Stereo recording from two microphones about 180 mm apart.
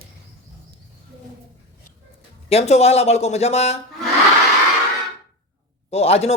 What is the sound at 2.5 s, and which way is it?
Speech, 35° left (ahead or behind).